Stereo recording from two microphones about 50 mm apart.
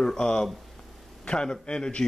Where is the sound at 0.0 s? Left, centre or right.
Centre.